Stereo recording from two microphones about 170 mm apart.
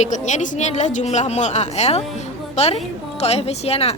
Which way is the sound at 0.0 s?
45° left (ahead or behind).